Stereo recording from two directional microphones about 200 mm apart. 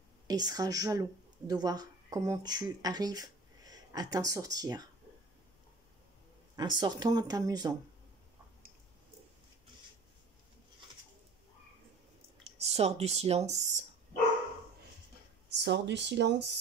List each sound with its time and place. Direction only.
0.3 s speech: 20° right (ahead or behind)
6.5 s speech: 20° right (ahead or behind)
12.5 s speech: 30° right (ahead or behind)
15.5 s speech: 60° right (ahead or behind)